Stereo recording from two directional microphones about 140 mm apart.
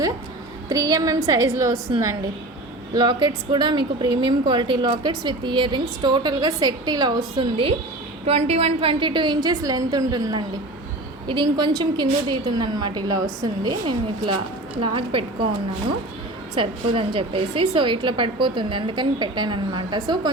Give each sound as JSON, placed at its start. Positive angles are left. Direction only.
{"t": 0.7, "sound": "a woman's voice", "side_deg": -25}
{"t": 2.9, "sound": "speech", "side_deg": -30}
{"t": 16.6, "sound": "speech", "side_deg": -40}